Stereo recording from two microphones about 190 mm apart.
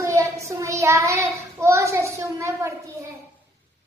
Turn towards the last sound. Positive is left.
turn(degrees=-15)  # may be behind; listen again after turning